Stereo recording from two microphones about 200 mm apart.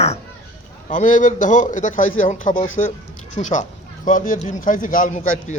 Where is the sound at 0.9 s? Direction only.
40° left (ahead or behind).